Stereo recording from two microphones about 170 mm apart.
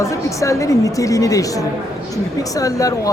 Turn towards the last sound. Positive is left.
turn(degrees=20)  # may be behind; listen again after turning